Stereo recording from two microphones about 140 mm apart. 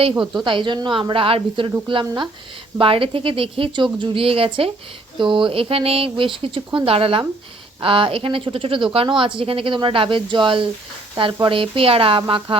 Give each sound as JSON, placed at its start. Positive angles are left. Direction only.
{"t": 0.4, "sound": "a woman's voice", "side_deg": -35}